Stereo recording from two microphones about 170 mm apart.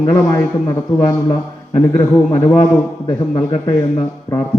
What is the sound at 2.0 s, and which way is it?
A man's voice, 20° left (ahead or behind).